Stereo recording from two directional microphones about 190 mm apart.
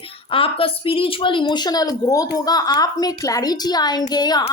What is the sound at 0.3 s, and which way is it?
Speech, 30° left (ahead or behind).